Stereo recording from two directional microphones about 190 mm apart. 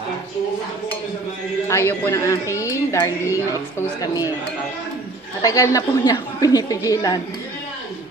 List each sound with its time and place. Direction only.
1.7 s a woman's voice: 15° left (ahead or behind)
5.4 s a woman's voice: 15° left (ahead or behind)